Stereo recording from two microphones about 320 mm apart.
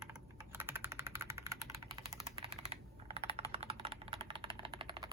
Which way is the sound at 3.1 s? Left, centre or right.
Centre.